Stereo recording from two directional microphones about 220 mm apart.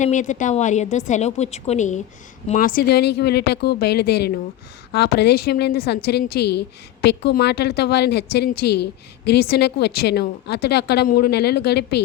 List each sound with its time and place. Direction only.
0.0 s a woman's voice: 35° left (ahead or behind)